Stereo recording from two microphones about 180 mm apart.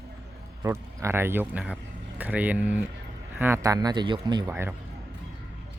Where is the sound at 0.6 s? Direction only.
15° right (ahead or behind).